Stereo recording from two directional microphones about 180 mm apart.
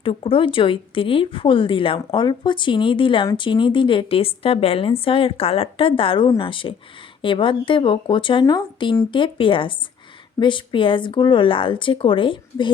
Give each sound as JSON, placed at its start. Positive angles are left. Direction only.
{"t": 0.0, "sound": "speech", "side_deg": 30}